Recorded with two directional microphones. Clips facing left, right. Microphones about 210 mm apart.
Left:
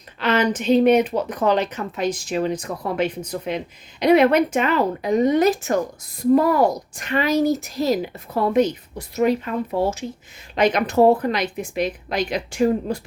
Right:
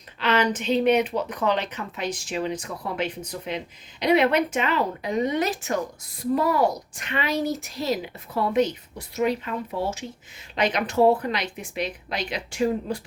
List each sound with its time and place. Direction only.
0.2 s speech: 45° left (ahead or behind)